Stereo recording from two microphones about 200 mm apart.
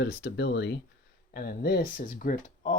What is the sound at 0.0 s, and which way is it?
Speech, 55° left (ahead or behind).